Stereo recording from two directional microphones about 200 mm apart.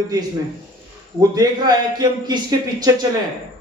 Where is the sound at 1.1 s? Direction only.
20° right (ahead or behind).